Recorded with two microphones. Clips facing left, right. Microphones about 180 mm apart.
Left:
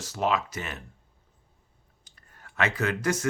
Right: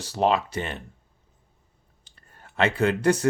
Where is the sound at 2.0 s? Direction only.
30° right (ahead or behind).